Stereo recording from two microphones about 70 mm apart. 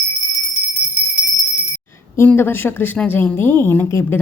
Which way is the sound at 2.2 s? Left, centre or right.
Left.